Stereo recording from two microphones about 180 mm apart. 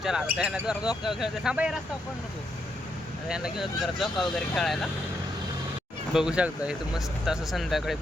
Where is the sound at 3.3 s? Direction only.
Centre (ahead or behind).